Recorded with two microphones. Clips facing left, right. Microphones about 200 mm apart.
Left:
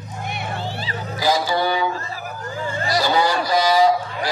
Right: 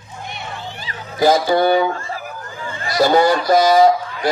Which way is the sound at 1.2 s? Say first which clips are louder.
Right 6 dB; 50° right (ahead or behind).